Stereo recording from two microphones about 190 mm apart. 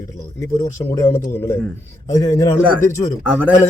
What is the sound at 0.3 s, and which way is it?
Speech, 15° left (ahead or behind).